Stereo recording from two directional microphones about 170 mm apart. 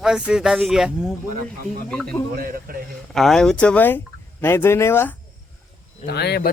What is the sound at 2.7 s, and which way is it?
Speech, 55° right (ahead or behind).